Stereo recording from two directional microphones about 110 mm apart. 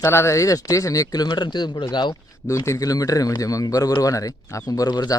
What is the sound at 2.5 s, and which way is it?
Speech, 30° left (ahead or behind).